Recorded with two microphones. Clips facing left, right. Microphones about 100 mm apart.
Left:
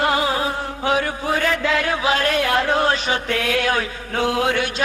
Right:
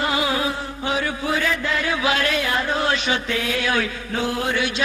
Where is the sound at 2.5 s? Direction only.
70° left (ahead or behind).